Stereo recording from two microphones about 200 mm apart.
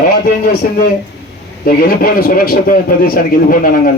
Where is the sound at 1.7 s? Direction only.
45° left (ahead or behind).